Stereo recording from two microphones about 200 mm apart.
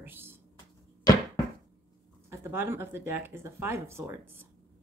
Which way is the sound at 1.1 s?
20° left (ahead or behind).